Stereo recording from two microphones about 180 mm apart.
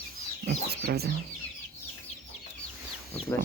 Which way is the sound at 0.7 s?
60° right (ahead or behind).